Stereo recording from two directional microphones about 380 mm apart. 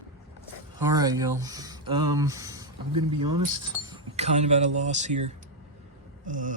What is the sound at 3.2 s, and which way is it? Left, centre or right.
Speech, right.